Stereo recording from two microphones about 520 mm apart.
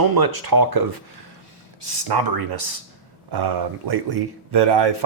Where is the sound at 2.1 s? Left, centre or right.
Right.